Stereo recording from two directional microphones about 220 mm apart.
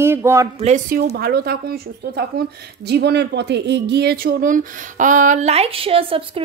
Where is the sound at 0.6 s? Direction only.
35° right (ahead or behind).